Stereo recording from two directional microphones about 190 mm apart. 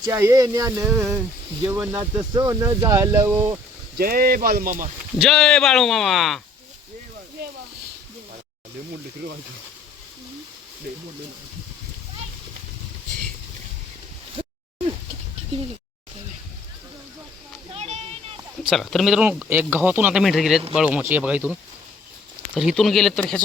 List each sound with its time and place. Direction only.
0.1 s speech: 15° right (ahead or behind)
3.9 s speech: 50° right (ahead or behind)
5.1 s speech: centre (ahead or behind)
14.4 s a sound: 25° right (ahead or behind)
17.7 s a sound: 35° right (ahead or behind)
18.6 s speech: centre (ahead or behind)
22.5 s speech: centre (ahead or behind)